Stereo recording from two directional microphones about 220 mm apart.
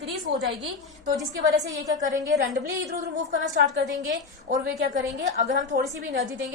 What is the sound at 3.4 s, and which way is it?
Speech, 50° right (ahead or behind).